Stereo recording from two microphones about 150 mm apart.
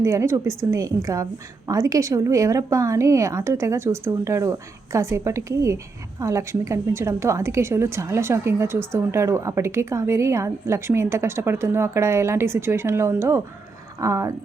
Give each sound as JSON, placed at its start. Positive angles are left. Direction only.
{"t": 0.0, "sound": "a woman's voice", "side_deg": -20}